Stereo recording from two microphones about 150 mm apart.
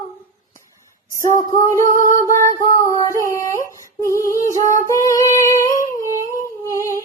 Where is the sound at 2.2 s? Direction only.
20° left (ahead or behind).